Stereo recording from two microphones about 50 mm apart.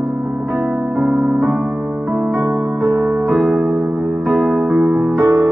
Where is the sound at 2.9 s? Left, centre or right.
Right.